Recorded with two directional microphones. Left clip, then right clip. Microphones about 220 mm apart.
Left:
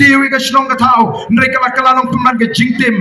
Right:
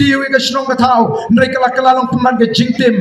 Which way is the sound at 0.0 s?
15° left (ahead or behind).